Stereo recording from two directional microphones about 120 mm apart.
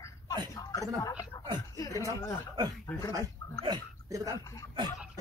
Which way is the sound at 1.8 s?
25° left (ahead or behind).